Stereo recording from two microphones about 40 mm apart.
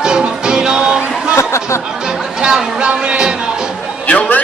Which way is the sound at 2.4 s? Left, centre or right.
Right.